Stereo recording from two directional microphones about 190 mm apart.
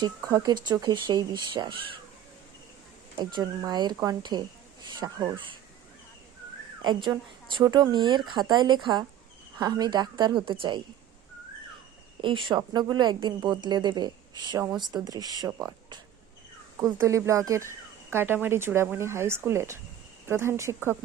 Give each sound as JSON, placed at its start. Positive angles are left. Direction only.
{"t": 0.0, "sound": "a woman's voice", "side_deg": -20}
{"t": 3.2, "sound": "a woman's voice", "side_deg": -20}
{"t": 6.8, "sound": "a woman's voice", "side_deg": -25}
{"t": 12.2, "sound": "a woman's voice", "side_deg": -25}